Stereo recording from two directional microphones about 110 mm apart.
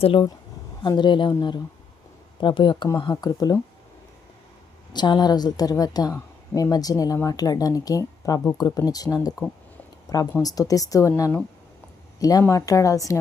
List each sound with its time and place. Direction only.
0.0 s speech: 55° left (ahead or behind)
0.8 s a woman's voice: 40° left (ahead or behind)
4.9 s a woman's voice: 40° left (ahead or behind)
12.2 s a woman's voice: 30° left (ahead or behind)